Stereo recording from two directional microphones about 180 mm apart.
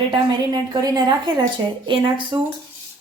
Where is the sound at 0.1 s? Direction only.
25° right (ahead or behind).